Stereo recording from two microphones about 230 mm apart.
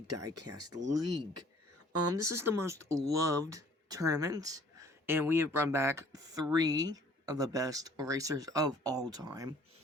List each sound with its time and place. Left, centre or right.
0.3 s speech: right
2.2 s speech: centre